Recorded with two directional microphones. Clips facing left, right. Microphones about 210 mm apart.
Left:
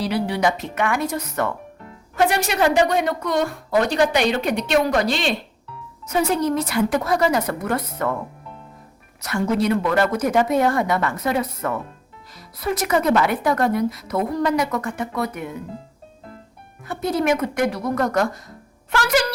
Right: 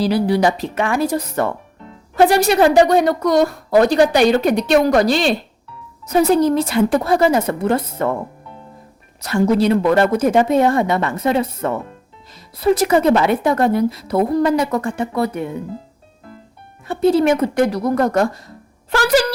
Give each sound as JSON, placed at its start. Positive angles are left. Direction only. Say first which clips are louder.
{"t": 0.0, "sound": "a woman's voice", "louder": "right 5 dB", "side_deg": -35}
{"t": 9.2, "sound": "a woman's voice", "louder": "right 5 dB", "side_deg": -30}
{"t": 16.8, "sound": "a woman's voice", "louder": "right 7 dB", "side_deg": -30}